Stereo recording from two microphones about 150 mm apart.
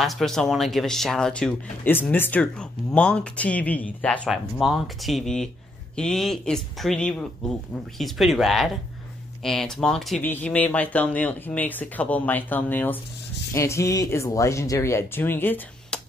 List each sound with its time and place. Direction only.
0.0 s speech: centre (ahead or behind)